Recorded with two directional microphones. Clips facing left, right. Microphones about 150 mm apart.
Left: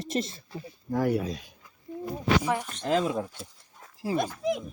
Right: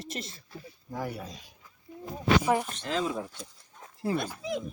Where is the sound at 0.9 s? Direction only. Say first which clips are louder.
Left 10 dB; 75° left (ahead or behind).